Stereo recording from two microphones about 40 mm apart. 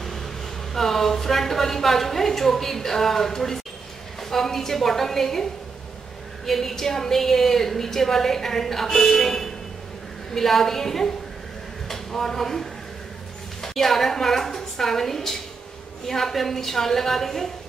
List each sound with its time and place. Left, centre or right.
0.7 s a woman's voice: centre